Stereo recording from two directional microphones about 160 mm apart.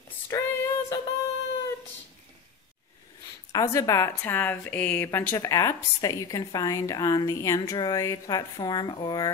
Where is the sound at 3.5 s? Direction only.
20° left (ahead or behind).